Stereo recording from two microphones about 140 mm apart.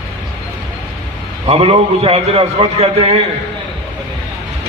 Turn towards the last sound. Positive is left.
turn(degrees=-45)  # may be behind; listen again after turning